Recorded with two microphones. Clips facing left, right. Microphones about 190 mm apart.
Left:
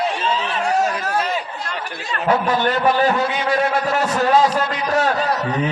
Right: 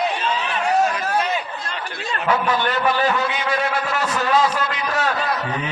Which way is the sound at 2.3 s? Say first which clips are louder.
Left 3 dB; 35° left (ahead or behind).